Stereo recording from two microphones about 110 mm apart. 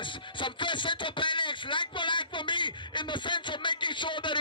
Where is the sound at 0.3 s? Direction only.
45° left (ahead or behind).